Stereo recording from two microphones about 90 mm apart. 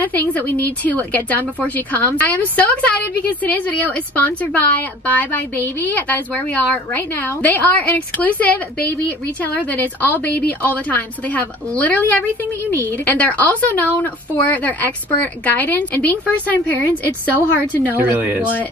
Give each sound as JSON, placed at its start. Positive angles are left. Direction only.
{"t": 0.0, "sound": "a woman's voice", "side_deg": 20}
{"t": 18.1, "sound": "speech", "side_deg": -20}